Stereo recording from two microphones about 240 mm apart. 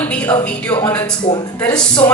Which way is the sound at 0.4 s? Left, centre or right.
Centre.